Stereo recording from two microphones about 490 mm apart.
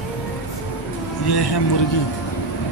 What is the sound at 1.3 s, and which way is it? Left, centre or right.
Speech, left.